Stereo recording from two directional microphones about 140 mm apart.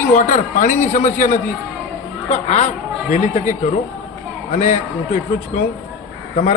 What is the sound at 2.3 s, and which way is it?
Speech, 55° left (ahead or behind).